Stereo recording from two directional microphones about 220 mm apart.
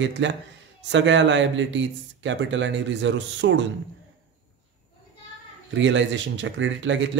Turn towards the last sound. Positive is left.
turn(degrees=-55)  # may be behind; listen again after turning